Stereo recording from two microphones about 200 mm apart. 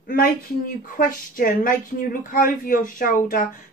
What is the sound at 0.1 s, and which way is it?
Speech, 45° left (ahead or behind).